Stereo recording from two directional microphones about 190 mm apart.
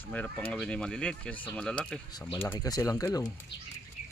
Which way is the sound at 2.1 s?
15° left (ahead or behind).